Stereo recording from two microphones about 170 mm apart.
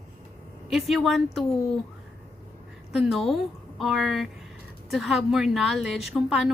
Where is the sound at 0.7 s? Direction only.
Centre (ahead or behind).